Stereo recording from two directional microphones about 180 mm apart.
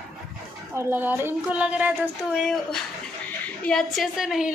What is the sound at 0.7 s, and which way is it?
A woman's voice, 10° right (ahead or behind).